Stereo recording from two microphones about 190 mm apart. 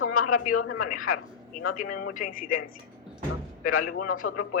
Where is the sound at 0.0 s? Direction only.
90° left.